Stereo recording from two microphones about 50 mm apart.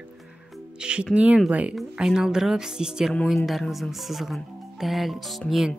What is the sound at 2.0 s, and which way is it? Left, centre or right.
Speech, centre.